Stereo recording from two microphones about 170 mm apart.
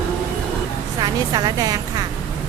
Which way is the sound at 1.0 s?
25° right (ahead or behind).